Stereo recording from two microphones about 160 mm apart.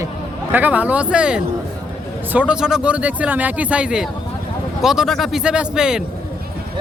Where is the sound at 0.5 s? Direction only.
10° right (ahead or behind).